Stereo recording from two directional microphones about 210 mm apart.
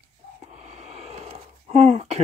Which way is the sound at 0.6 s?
30° right (ahead or behind).